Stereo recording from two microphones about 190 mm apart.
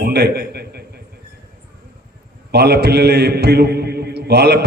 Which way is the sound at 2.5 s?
60° right (ahead or behind).